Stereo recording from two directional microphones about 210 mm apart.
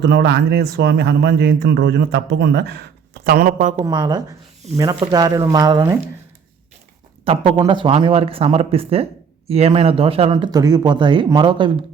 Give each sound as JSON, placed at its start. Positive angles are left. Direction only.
{"t": 0.0, "sound": "speech", "side_deg": -55}
{"t": 3.8, "sound": "speech", "side_deg": -20}
{"t": 7.3, "sound": "speech", "side_deg": -25}